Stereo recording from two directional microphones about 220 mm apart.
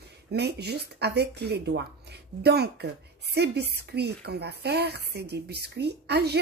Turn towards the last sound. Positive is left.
turn(degrees=-50)  # may be behind; listen again after turning